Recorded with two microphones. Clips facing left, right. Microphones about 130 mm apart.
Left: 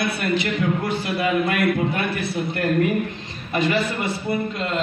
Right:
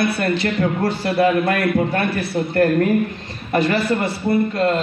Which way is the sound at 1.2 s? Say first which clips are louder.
Right 5 dB; 55° right (ahead or behind).